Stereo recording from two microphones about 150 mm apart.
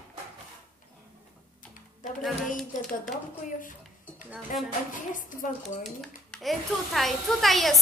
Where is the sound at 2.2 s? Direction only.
Centre (ahead or behind).